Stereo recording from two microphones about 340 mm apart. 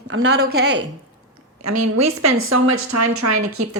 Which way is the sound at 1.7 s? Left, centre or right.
Right.